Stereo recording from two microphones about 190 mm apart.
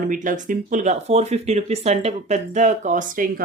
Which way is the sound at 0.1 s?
45° right (ahead or behind).